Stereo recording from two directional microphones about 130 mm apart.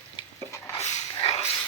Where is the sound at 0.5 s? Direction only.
25° left (ahead or behind).